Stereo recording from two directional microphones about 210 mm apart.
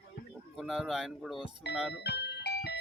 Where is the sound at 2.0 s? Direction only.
55° left (ahead or behind).